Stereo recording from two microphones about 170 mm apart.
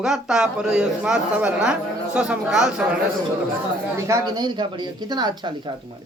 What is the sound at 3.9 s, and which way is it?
Speech, 20° right (ahead or behind).